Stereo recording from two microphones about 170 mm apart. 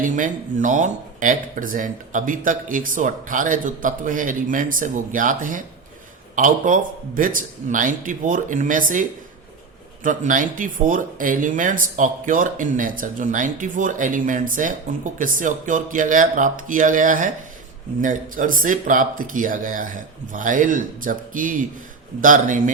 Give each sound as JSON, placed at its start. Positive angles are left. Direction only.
{"t": 0.0, "sound": "speech", "side_deg": -50}